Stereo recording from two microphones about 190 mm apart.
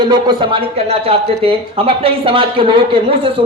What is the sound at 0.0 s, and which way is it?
Speech, 25° right (ahead or behind).